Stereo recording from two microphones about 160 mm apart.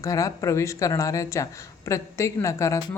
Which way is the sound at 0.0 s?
20° left (ahead or behind).